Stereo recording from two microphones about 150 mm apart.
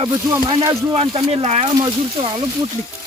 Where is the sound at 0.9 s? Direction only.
45° right (ahead or behind).